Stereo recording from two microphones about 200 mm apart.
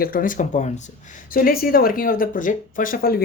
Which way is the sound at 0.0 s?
45° left (ahead or behind).